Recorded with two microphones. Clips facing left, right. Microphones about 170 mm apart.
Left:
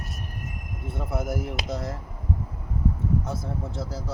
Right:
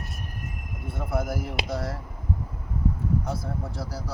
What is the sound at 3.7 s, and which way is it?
Speech, 20° left (ahead or behind).